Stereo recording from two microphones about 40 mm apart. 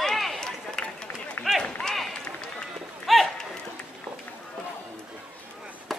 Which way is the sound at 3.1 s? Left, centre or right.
Centre.